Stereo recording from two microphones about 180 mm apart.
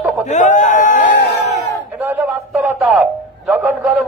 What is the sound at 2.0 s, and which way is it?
A man's voice, 10° right (ahead or behind).